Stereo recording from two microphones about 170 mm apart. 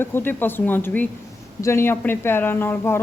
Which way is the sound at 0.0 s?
15° left (ahead or behind).